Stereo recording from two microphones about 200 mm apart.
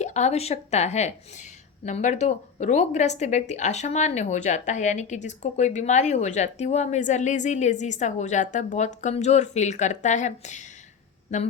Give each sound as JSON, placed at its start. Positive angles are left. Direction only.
{"t": 0.0, "sound": "speech", "side_deg": 35}